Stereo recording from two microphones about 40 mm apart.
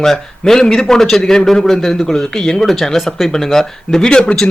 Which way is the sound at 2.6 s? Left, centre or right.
Centre.